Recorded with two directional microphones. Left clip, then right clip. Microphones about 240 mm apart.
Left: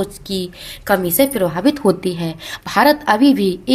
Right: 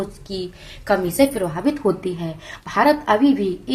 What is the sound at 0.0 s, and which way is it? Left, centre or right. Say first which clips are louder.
A woman's voice: left 5 dB; left.